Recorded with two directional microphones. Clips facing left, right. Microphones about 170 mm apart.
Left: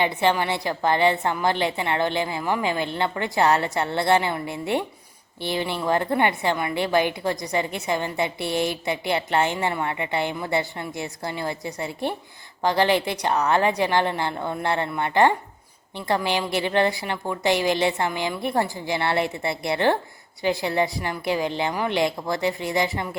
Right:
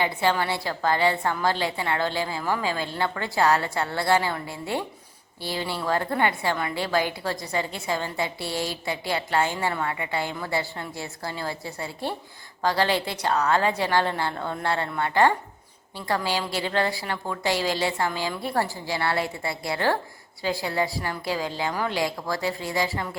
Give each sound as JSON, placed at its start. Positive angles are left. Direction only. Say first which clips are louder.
{"t": 0.0, "sound": "a woman's voice", "louder": "left 2 dB", "side_deg": 20}